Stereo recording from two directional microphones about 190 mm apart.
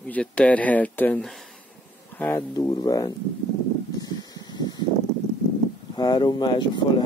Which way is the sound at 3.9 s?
20° left (ahead or behind).